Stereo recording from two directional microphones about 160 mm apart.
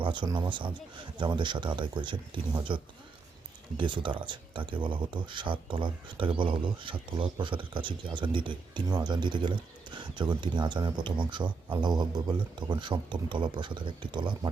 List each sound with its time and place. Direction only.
0.0 s speech: 30° right (ahead or behind)